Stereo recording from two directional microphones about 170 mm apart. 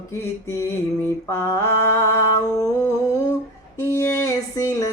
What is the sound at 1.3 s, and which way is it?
Speech, 15° left (ahead or behind).